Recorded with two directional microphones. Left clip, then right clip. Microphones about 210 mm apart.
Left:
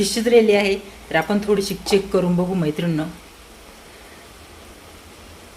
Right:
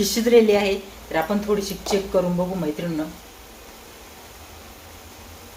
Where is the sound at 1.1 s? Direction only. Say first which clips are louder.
Left 3 dB; 35° left (ahead or behind).